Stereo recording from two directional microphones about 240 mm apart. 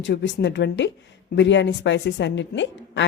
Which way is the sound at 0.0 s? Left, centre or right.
Left.